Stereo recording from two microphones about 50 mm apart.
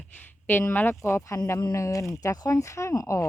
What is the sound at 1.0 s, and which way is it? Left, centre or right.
Speech, left.